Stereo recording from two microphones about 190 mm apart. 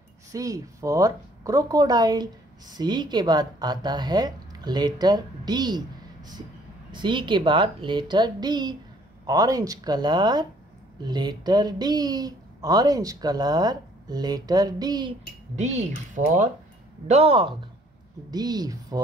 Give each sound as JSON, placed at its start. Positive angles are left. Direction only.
{"t": 0.3, "sound": "speech", "side_deg": -15}
{"t": 6.9, "sound": "speech", "side_deg": -25}
{"t": 15.5, "sound": "speech", "side_deg": -35}
{"t": 17.1, "sound": "speech", "side_deg": -30}